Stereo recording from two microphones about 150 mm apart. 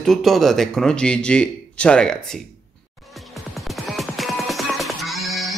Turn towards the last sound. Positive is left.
turn(degrees=0)  # may be behind; listen again after turning